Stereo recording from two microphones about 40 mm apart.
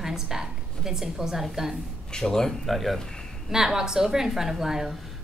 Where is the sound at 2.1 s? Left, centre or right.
Centre.